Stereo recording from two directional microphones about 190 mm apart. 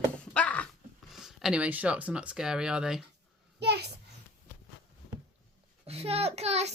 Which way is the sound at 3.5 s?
60° right (ahead or behind).